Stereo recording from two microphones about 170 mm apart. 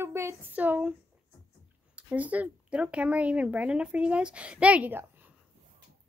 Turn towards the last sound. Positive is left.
turn(degrees=-10)  # may be behind; listen again after turning